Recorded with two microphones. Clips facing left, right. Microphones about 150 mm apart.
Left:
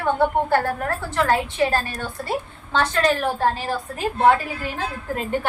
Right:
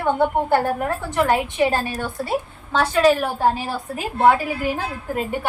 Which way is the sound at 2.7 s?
5° right (ahead or behind).